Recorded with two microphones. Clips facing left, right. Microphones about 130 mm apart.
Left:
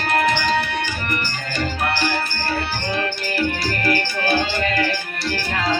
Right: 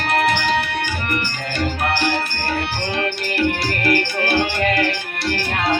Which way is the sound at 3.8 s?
65° right (ahead or behind).